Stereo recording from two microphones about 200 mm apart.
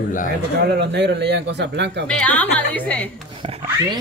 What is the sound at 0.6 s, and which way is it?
Speech, 60° right (ahead or behind).